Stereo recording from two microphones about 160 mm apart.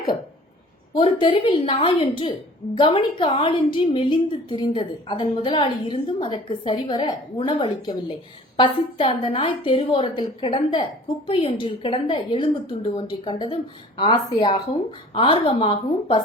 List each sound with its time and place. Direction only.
0.9 s a woman's voice: 35° left (ahead or behind)